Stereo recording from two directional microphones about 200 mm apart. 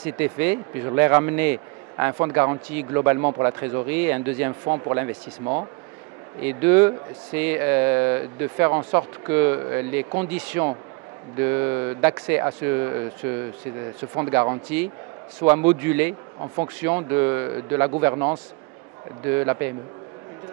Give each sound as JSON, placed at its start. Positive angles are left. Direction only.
{"t": 0.0, "sound": "speech", "side_deg": -10}
{"t": 4.6, "sound": "speech", "side_deg": -25}
{"t": 6.4, "sound": "speech", "side_deg": -10}
{"t": 14.1, "sound": "speech", "side_deg": -20}
{"t": 18.1, "sound": "speech", "side_deg": -25}
{"t": 19.2, "sound": "speech", "side_deg": -15}